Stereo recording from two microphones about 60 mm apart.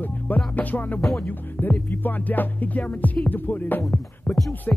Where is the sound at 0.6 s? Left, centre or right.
Left.